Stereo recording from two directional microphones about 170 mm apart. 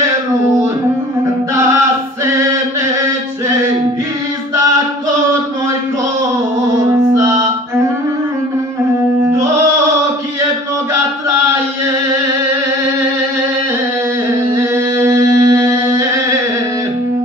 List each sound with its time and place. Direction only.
1.5 s singing: 15° right (ahead or behind)
7.2 s music: 20° right (ahead or behind)
14.5 s mantra: 15° right (ahead or behind)